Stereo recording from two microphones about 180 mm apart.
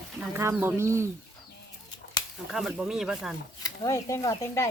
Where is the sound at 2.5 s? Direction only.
Centre (ahead or behind).